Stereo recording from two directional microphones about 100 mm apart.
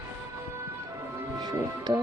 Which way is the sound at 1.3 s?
40° right (ahead or behind).